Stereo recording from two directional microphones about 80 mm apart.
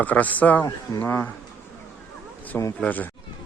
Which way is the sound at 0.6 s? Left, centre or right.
Left.